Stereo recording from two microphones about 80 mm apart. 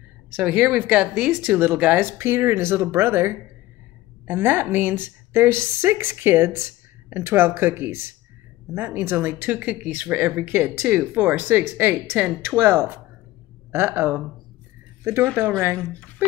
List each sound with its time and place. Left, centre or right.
0.4 s speech: centre
1.3 s a woman's voice: right
15.4 s speech: right
15.8 s speech: centre